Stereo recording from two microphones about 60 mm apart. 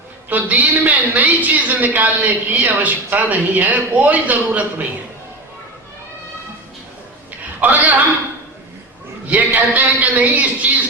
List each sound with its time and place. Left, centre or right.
0.3 s a woman's voice: right
7.6 s a woman's voice: right
9.2 s a woman's voice: right